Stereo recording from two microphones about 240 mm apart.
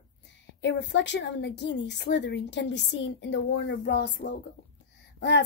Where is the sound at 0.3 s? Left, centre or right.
Left.